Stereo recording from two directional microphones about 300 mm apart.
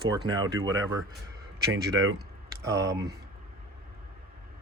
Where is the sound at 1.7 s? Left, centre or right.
Right.